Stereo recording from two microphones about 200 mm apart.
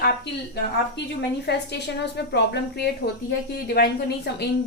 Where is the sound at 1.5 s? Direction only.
55° left (ahead or behind).